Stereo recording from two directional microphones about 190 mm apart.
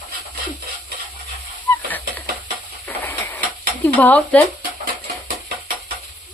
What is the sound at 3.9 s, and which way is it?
Speech, 5° left (ahead or behind).